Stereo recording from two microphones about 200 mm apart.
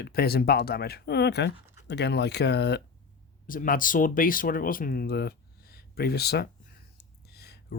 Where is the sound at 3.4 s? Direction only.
45° left (ahead or behind).